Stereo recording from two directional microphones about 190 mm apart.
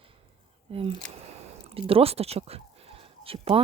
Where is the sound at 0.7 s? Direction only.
30° right (ahead or behind).